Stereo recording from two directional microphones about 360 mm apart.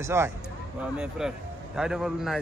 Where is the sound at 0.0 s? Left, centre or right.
Centre.